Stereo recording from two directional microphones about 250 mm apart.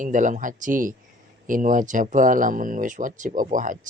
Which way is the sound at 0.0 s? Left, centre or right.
Right.